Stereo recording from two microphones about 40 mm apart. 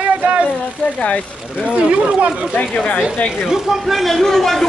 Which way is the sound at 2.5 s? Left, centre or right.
Left.